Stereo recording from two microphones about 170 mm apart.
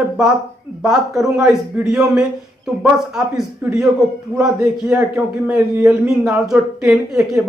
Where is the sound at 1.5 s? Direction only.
5° right (ahead or behind).